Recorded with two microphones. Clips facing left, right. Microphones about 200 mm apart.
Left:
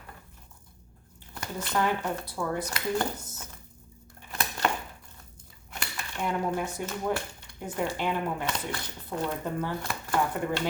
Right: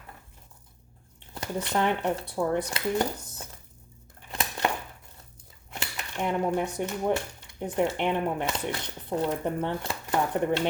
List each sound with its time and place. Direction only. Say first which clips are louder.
1.3 s speech: right 3 dB; 25° right (ahead or behind)
4.3 s a sound: even; 25° right (ahead or behind)
5.8 s cutlery: right 2 dB; 20° right (ahead or behind)
6.8 s speech: right 3 dB; 25° right (ahead or behind)